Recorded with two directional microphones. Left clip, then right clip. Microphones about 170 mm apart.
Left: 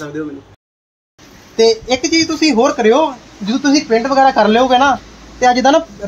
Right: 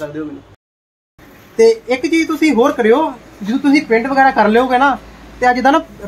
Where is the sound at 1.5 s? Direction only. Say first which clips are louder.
Right 1 dB; 25° left (ahead or behind).